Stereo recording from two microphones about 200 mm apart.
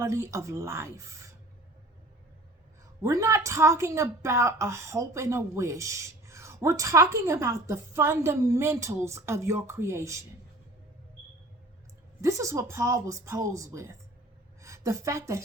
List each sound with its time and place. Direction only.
0.0 s a woman's voice: 15° right (ahead or behind)
3.0 s a woman's voice: 15° right (ahead or behind)
12.2 s a woman's voice: 15° right (ahead or behind)